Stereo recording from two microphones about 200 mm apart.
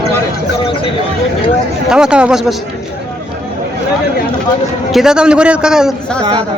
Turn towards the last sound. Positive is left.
turn(degrees=0)  # may be behind; listen again after turning